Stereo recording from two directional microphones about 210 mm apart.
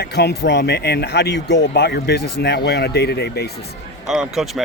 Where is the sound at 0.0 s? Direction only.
50° left (ahead or behind).